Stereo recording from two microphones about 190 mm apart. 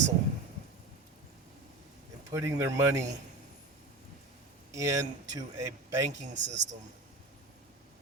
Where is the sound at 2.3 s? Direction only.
15° right (ahead or behind).